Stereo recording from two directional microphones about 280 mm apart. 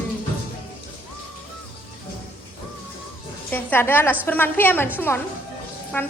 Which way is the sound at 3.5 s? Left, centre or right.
Centre.